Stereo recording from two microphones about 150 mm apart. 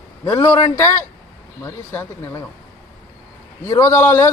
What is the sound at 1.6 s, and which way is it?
Speech, 15° left (ahead or behind).